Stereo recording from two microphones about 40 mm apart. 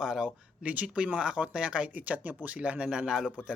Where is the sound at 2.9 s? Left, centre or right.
Centre.